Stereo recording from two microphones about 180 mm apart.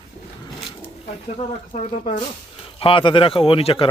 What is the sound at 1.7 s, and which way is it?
Speech, 45° left (ahead or behind).